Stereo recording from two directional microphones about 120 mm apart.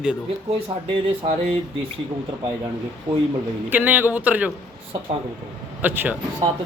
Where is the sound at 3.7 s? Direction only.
15° right (ahead or behind).